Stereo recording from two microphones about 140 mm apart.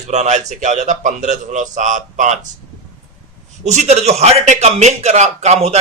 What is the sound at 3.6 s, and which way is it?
A man's voice, 55° right (ahead or behind).